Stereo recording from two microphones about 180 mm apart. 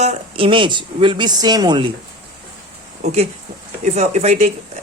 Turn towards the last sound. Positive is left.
turn(degrees=-35)  # may be behind; listen again after turning